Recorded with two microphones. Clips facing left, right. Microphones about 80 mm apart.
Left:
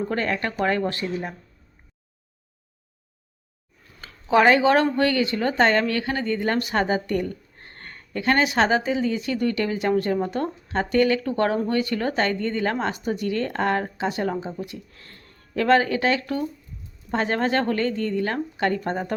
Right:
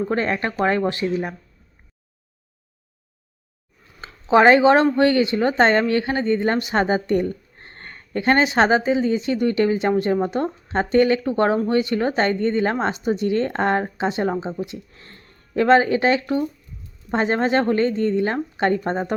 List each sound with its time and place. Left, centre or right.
0.1 s speech: right
4.0 s speech: right